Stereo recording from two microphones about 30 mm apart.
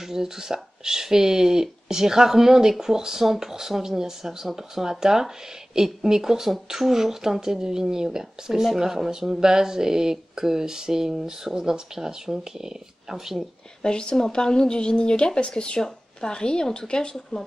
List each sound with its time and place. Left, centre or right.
0.0 s speech: centre
9.3 s speech: right
13.8 s a woman's voice: left